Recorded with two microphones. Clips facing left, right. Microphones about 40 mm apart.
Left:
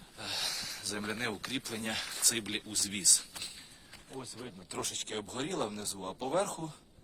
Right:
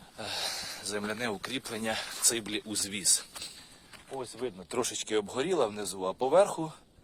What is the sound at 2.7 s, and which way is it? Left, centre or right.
Speech, centre.